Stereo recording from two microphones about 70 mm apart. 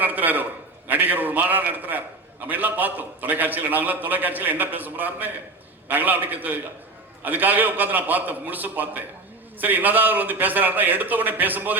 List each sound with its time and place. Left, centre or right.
0.0 s a man's voice: right